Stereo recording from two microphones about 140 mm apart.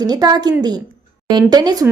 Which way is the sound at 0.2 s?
30° right (ahead or behind).